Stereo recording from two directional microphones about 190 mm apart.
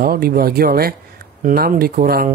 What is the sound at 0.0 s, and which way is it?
Speech, 50° right (ahead or behind).